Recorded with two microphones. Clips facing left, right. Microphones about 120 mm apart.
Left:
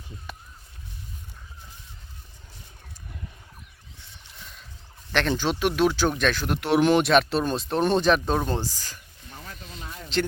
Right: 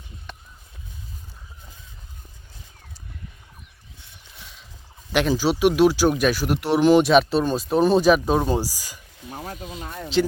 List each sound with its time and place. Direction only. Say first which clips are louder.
5.1 s speech: right 4 dB; 5° right (ahead or behind)
9.3 s snake: right 9 dB; 45° right (ahead or behind)
9.8 s speech: right 4 dB; 50° right (ahead or behind)